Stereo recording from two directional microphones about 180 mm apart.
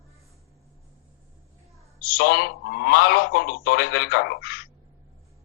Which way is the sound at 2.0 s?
55° left (ahead or behind).